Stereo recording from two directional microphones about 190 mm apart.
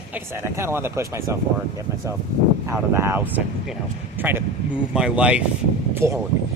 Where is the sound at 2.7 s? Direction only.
10° right (ahead or behind).